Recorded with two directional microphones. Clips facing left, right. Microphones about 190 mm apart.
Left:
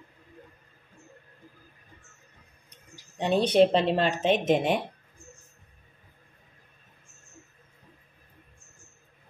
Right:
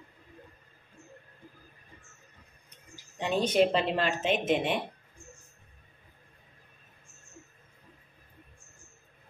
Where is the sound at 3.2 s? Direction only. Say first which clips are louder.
Left 4 dB; 35° left (ahead or behind).